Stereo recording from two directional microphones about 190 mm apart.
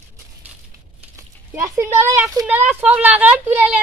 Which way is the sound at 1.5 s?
15° right (ahead or behind).